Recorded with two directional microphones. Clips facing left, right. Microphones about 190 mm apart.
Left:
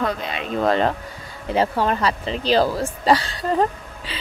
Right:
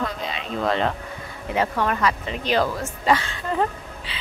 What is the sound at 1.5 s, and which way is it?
Speech, 30° left (ahead or behind).